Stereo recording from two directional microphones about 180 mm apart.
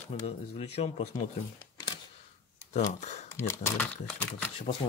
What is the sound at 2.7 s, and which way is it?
Speech, 40° left (ahead or behind).